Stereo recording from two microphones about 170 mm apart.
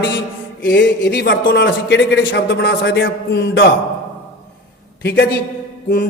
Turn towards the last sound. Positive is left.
turn(degrees=55)  # may be behind; listen again after turning